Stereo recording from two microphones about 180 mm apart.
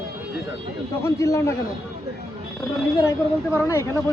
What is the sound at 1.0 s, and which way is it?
Speech, 15° left (ahead or behind).